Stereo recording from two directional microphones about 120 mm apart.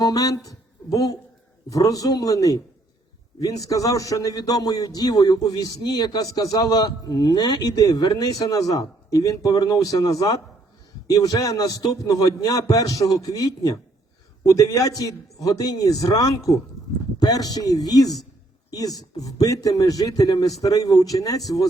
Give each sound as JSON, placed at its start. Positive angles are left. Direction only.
{"t": 0.0, "sound": "a man's voice", "side_deg": 30}